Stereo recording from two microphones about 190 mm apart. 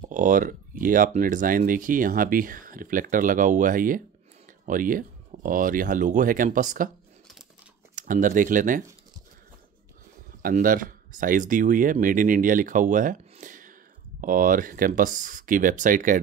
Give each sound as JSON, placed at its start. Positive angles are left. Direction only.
{"t": 0.1, "sound": "speech", "side_deg": -40}
{"t": 7.9, "sound": "speech", "side_deg": -45}
{"t": 10.4, "sound": "speech", "side_deg": -45}